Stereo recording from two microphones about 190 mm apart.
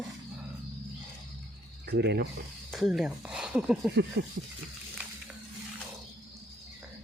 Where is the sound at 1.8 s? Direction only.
60° right (ahead or behind).